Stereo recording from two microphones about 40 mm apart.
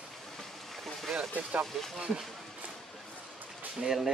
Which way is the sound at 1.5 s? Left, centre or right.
Right.